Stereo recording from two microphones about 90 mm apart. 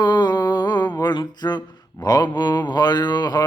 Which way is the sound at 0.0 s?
50° left (ahead or behind).